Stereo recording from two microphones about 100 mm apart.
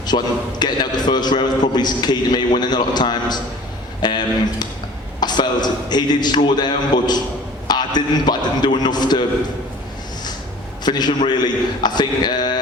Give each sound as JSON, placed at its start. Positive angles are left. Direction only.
{"t": 0.1, "sound": "a man's voice", "side_deg": 60}
{"t": 0.6, "sound": "a man's voice", "side_deg": 45}
{"t": 5.2, "sound": "a man's voice", "side_deg": 45}
{"t": 10.8, "sound": "a man's voice", "side_deg": 45}